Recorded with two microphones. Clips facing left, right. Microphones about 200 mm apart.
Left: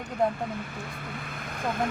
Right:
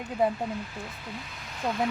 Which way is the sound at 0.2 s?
5° right (ahead or behind).